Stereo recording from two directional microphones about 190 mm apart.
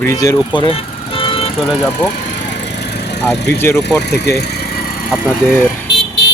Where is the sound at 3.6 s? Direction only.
10° left (ahead or behind).